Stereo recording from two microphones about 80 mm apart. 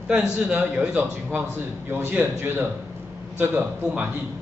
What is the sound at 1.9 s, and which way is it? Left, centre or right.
A man's voice, right.